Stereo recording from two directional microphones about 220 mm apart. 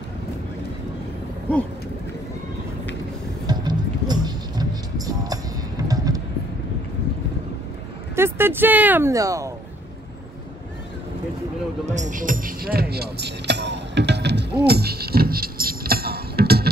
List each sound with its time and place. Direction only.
3.4 s music: 20° right (ahead or behind)
8.2 s speech: 10° right (ahead or behind)
11.8 s music: 35° right (ahead or behind)